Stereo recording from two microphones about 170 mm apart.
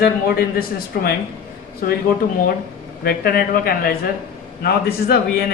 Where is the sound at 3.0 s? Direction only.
60° left (ahead or behind).